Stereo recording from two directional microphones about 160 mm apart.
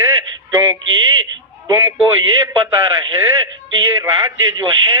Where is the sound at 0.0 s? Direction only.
20° right (ahead or behind).